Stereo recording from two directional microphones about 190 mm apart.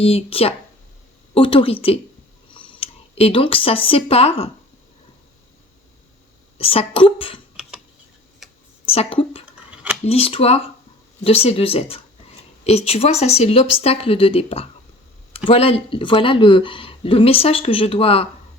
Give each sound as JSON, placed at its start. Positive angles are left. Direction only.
{"t": 0.0, "sound": "speech", "side_deg": 30}
{"t": 6.6, "sound": "speech", "side_deg": 30}
{"t": 8.4, "sound": "tick", "side_deg": 0}
{"t": 8.9, "sound": "speech", "side_deg": 30}
{"t": 9.5, "sound": "a sound", "side_deg": -5}
{"t": 10.1, "sound": "speech", "side_deg": 30}